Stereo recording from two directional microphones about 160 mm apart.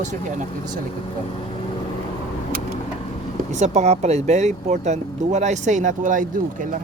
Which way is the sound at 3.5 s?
45° right (ahead or behind).